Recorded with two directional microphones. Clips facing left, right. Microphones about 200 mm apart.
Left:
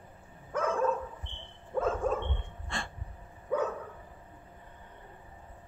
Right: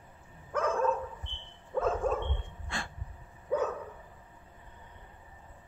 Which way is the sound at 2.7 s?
Centre (ahead or behind).